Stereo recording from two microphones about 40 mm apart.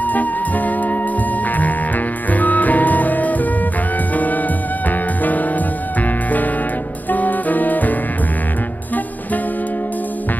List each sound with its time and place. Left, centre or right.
0.0 s music: left
2.3 s music: left
7.1 s music: left